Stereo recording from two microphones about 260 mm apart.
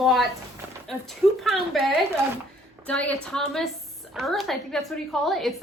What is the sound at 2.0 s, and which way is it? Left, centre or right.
Speech, centre.